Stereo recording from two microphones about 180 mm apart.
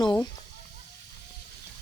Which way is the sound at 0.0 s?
25° left (ahead or behind).